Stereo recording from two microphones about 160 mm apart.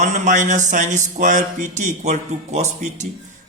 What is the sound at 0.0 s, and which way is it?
A man's voice, 50° right (ahead or behind).